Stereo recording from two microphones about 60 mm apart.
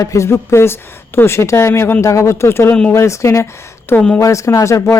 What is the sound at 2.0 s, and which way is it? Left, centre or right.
Speech, left.